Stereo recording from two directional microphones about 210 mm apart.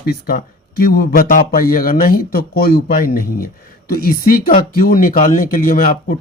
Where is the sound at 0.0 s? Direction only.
45° left (ahead or behind).